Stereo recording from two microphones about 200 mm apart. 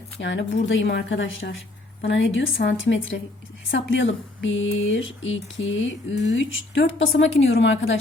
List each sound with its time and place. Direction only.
0.2 s speech: 65° left (ahead or behind)